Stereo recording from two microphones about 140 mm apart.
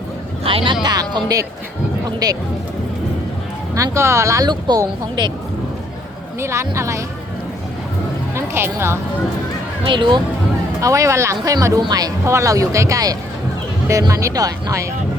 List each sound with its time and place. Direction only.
0.4 s speech: 40° right (ahead or behind)
3.8 s speech: 20° right (ahead or behind)
6.4 s speech: 20° right (ahead or behind)
8.4 s speech: 15° right (ahead or behind)
9.8 s speech: 35° right (ahead or behind)
10.8 s speech: 25° right (ahead or behind)